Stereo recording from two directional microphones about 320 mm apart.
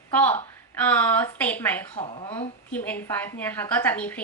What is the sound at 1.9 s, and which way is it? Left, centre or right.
Speech, centre.